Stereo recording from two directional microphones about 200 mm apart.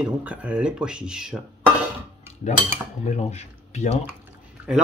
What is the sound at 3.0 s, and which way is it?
Speech, 35° left (ahead or behind).